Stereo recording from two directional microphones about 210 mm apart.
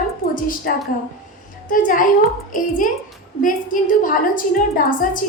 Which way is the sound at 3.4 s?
40° left (ahead or behind).